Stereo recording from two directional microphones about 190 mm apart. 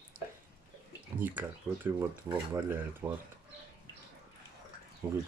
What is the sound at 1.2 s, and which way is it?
Speech, 10° right (ahead or behind).